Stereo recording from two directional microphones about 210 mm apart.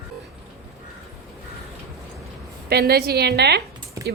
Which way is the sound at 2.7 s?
50° right (ahead or behind).